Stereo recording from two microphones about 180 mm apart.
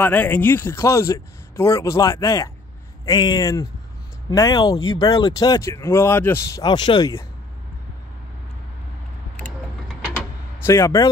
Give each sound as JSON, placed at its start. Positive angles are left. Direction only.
{"t": 0.0, "sound": "speech", "side_deg": 10}
{"t": 10.7, "sound": "speech", "side_deg": 15}